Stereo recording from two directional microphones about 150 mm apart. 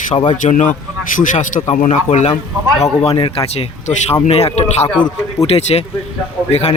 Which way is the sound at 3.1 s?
35° left (ahead or behind).